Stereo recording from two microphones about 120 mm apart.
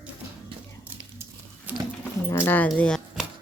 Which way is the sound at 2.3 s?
20° left (ahead or behind).